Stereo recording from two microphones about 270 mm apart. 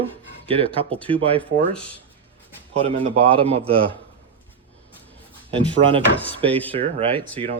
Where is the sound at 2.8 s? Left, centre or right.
Right.